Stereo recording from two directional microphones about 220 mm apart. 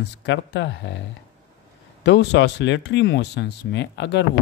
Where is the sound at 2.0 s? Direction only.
50° left (ahead or behind).